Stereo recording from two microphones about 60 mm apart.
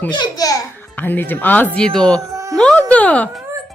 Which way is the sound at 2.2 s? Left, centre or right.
Right.